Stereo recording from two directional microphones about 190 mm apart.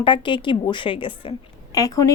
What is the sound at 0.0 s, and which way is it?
A woman's voice, 25° left (ahead or behind).